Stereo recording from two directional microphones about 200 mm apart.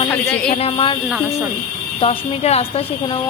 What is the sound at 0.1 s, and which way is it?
Speech, 15° left (ahead or behind).